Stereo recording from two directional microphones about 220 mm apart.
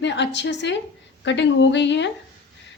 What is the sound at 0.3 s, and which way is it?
A woman's voice, 55° left (ahead or behind).